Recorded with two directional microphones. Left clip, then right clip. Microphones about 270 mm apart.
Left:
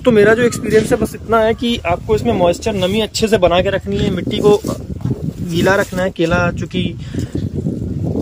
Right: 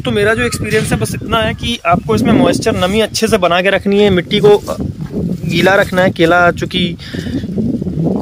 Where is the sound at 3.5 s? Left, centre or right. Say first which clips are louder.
Right 3 dB; right.